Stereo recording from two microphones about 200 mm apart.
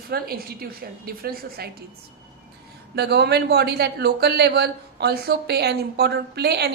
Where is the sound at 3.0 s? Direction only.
55° right (ahead or behind).